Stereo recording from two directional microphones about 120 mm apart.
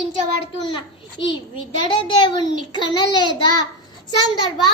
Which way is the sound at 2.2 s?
40° left (ahead or behind).